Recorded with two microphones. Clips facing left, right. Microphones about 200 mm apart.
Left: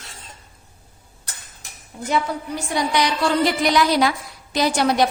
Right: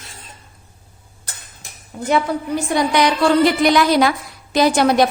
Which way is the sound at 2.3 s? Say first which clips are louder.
Right 6 dB; 60° right (ahead or behind).